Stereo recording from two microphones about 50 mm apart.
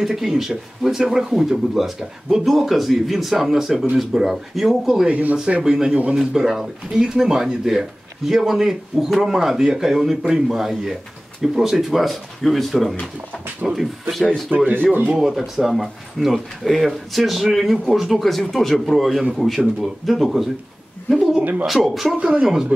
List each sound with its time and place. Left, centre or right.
0.0 s speech: centre
5.0 s speech: right
5.6 s speech: centre
13.6 s speech: centre
14.5 s speech: right
15.1 s speech: centre
21.4 s speech: right
21.6 s speech: centre
22.1 s speech: centre